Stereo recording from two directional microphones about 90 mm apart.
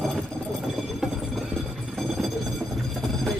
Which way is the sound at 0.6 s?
5° right (ahead or behind).